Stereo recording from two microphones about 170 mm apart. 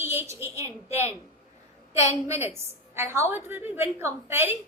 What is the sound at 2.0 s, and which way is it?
A woman's voice, 15° right (ahead or behind).